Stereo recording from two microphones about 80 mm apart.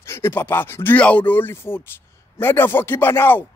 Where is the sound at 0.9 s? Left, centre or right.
Centre.